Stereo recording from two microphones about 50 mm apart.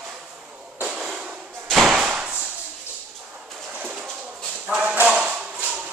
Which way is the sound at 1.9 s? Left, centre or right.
Centre.